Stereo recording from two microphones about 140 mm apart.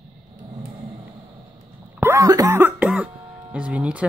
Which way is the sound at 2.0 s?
20° right (ahead or behind).